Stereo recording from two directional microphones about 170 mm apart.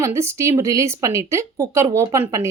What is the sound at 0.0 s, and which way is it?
A woman's voice, 15° right (ahead or behind).